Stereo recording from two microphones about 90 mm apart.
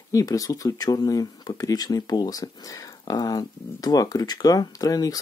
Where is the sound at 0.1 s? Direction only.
40° left (ahead or behind).